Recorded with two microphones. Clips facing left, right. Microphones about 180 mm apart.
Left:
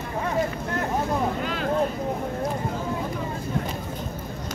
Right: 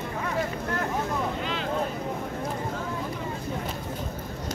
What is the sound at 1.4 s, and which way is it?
Vehicle, 50° left (ahead or behind).